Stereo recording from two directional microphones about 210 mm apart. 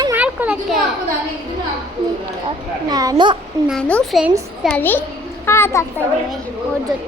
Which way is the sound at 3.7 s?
5° left (ahead or behind).